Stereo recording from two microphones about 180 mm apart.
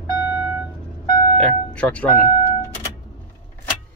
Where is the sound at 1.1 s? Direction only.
25° left (ahead or behind).